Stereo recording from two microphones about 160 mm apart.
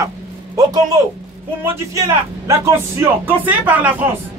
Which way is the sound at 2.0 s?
20° right (ahead or behind).